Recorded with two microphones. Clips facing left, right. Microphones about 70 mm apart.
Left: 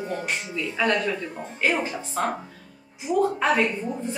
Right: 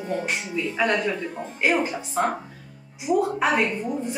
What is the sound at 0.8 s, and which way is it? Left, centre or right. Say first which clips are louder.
Speech: even; centre.